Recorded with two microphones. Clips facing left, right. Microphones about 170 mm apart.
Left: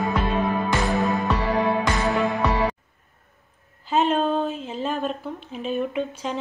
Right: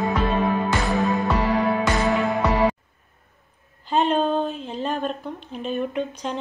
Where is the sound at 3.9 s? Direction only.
5° left (ahead or behind).